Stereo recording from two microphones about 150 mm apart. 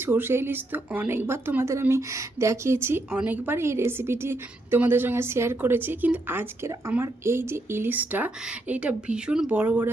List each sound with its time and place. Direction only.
0.0 s speech: 15° right (ahead or behind)